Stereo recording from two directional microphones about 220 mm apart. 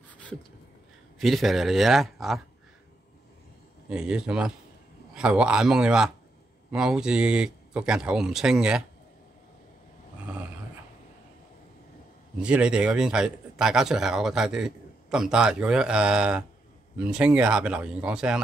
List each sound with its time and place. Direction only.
1.2 s a man's voice: centre (ahead or behind)
3.9 s a man's voice: 5° right (ahead or behind)
12.4 s a man's voice: 5° right (ahead or behind)